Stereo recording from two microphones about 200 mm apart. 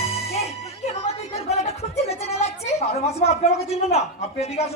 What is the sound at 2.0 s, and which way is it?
A woman's voice, 30° left (ahead or behind).